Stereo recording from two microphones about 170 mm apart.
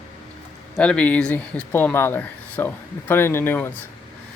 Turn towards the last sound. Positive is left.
turn(degrees=15)  # may be behind; listen again after turning